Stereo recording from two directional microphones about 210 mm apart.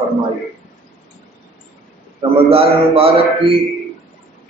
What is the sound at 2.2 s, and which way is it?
A man's voice, 25° right (ahead or behind).